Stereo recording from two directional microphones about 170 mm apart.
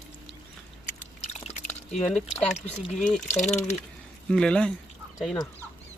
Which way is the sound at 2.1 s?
5° left (ahead or behind).